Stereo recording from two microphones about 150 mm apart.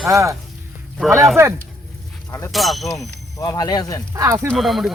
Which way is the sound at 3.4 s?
25° left (ahead or behind).